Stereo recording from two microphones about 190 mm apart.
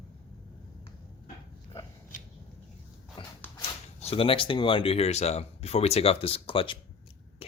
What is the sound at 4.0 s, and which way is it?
Speech, 30° left (ahead or behind).